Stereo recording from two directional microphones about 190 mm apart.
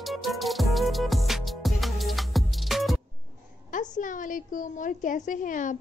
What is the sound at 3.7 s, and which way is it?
A woman's voice, 45° left (ahead or behind).